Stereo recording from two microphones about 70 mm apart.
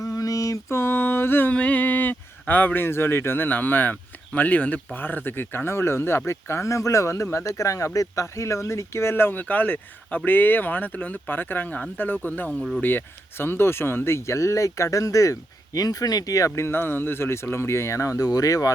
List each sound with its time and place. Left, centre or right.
0.0 s mantra: left
0.8 s a sound: left
4.4 s speech: left
16.6 s speech: left